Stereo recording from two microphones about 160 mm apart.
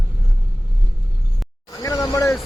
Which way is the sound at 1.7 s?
20° left (ahead or behind).